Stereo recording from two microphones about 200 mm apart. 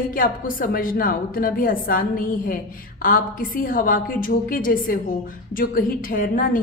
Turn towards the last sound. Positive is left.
turn(degrees=45)  # may be behind; listen again after turning